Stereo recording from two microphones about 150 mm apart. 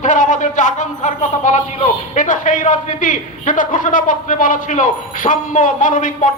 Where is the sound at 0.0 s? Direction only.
55° left (ahead or behind).